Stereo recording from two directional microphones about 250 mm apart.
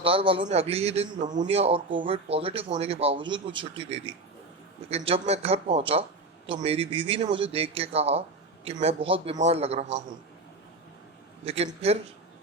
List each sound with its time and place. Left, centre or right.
0.0 s speech: right
11.4 s speech: right